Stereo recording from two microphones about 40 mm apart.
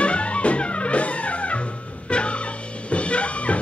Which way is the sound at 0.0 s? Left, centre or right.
Left.